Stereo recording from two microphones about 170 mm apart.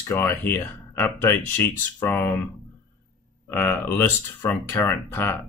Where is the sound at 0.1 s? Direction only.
15° left (ahead or behind).